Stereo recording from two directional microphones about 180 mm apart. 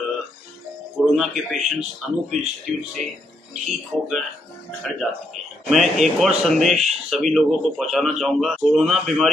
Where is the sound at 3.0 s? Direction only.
45° right (ahead or behind).